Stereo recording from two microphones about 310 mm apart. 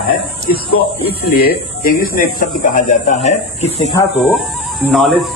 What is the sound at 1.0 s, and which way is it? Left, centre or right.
Speech, left.